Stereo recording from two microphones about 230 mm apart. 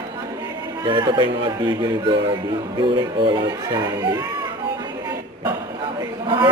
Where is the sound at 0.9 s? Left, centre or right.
Right.